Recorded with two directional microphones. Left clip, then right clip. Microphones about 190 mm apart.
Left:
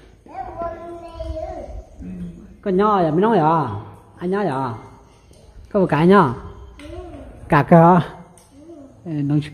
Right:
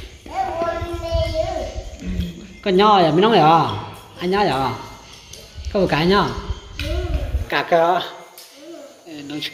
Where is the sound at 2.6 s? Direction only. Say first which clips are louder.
Right 4 dB; 25° left (ahead or behind).